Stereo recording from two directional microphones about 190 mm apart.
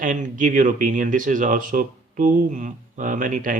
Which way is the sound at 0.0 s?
40° right (ahead or behind).